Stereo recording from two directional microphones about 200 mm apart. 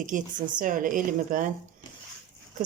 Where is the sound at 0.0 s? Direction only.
40° right (ahead or behind).